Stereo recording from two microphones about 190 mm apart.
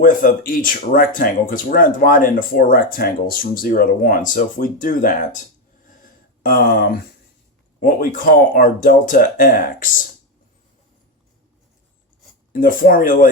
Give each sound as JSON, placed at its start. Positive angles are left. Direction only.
{"t": 0.0, "sound": "speech", "side_deg": 50}
{"t": 12.5, "sound": "speech", "side_deg": 45}